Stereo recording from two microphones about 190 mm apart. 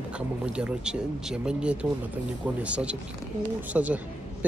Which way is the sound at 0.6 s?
5° right (ahead or behind).